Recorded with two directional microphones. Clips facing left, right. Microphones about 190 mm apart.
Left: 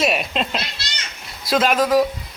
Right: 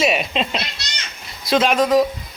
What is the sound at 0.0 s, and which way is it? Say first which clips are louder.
Speech: right 1 dB; centre (ahead or behind).